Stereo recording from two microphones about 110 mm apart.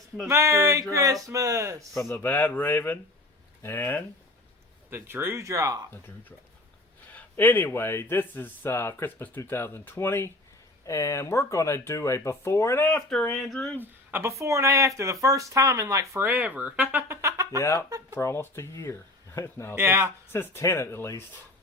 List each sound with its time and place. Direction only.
0.3 s speech: 25° right (ahead or behind)
2.0 s speech: 20° left (ahead or behind)
4.9 s speech: 20° right (ahead or behind)
7.1 s speech: 15° left (ahead or behind)
13.1 s speech: 5° left (ahead or behind)
14.1 s speech: 25° right (ahead or behind)
16.3 s speech: 15° right (ahead or behind); by 17.6 s 30° right (ahead or behind)
17.6 s speech: 30° left (ahead or behind)
19.7 s speech: 20° right (ahead or behind)
20.3 s speech: 20° left (ahead or behind)